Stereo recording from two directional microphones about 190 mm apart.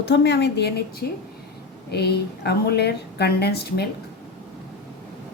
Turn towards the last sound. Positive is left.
turn(degrees=60)  # may be behind; listen again after turning